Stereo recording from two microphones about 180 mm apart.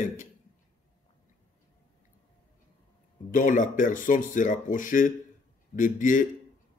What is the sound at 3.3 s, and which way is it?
Speech, 45° left (ahead or behind).